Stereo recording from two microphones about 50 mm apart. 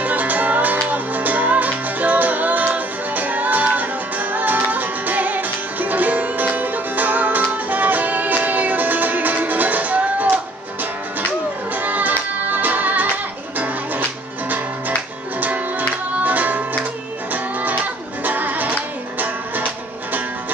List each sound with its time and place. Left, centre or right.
0.0 s music: right
16.3 s music: right